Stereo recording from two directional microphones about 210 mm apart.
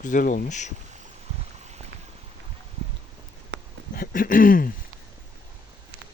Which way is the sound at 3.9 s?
45° left (ahead or behind).